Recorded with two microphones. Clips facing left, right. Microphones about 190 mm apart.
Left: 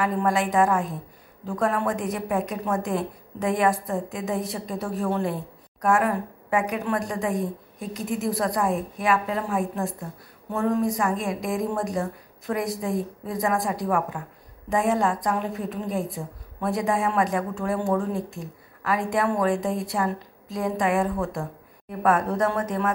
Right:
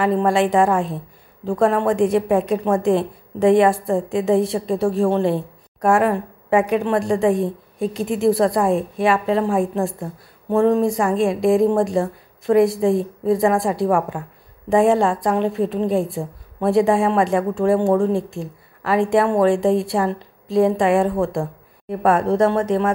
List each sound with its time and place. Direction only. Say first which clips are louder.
0.0 s a woman's voice: right 6 dB; 30° right (ahead or behind)